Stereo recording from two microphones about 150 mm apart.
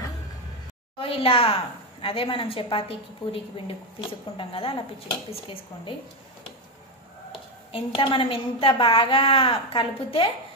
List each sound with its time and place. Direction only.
0.9 s a woman's voice: 40° left (ahead or behind)
4.4 s a woman's voice: 35° left (ahead or behind)
7.3 s a woman's voice: 35° left (ahead or behind)